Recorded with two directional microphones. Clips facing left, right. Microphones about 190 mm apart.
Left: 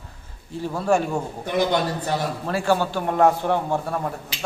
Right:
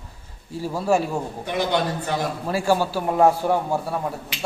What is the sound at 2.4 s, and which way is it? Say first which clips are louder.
A man's voice: right 1 dB; 10° right (ahead or behind).